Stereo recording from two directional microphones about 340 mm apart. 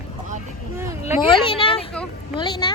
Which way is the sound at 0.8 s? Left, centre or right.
Centre.